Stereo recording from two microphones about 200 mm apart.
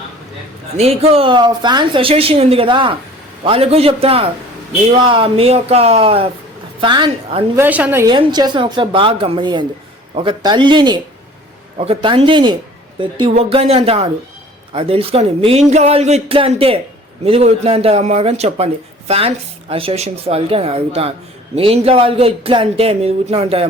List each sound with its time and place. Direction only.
0.8 s a woman's voice: 30° right (ahead or behind)
7.5 s a woman's voice: 10° right (ahead or behind)
8.0 s speech: 20° right (ahead or behind)